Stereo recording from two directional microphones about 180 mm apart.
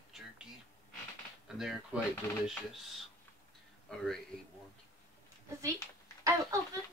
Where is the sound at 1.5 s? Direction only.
5° right (ahead or behind).